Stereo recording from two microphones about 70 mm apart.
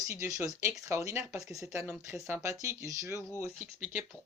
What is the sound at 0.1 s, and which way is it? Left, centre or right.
Speech, right.